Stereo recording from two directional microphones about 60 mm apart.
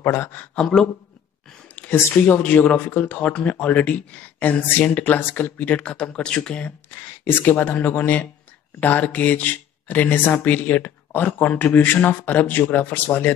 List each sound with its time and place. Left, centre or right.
0.0 s a man's voice: left
0.6 s speech: centre
1.8 s a sound: left
2.2 s speech: left; by 6.6 s centre
7.2 s speech: left